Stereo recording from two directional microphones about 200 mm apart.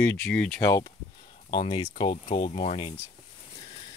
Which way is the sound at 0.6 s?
15° left (ahead or behind).